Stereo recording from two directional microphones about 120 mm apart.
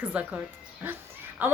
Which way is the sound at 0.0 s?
10° right (ahead or behind).